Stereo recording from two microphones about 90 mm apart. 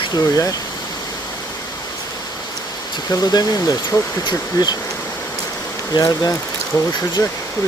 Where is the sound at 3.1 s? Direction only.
45° left (ahead or behind).